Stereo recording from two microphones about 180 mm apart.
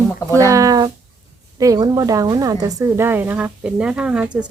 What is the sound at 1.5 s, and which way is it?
A woman's voice, 20° right (ahead or behind).